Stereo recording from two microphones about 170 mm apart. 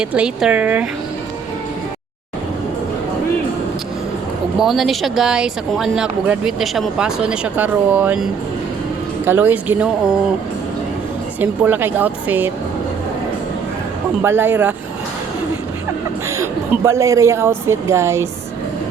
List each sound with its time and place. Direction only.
0.0 s speech: 5° right (ahead or behind)
4.6 s speech: centre (ahead or behind)
11.3 s speech: 10° right (ahead or behind)
14.2 s speech: 10° right (ahead or behind)
16.4 s a woman's voice: 15° right (ahead or behind)